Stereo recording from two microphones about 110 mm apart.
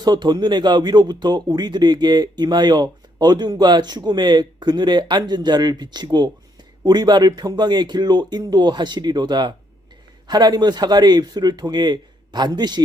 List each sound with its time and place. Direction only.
0.0 s speech: 40° right (ahead or behind)